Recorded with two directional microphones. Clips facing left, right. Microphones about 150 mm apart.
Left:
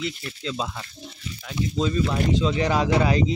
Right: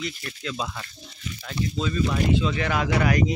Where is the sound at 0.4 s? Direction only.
25° left (ahead or behind).